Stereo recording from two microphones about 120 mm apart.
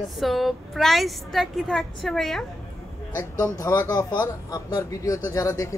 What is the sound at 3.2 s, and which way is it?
Speech, 25° left (ahead or behind).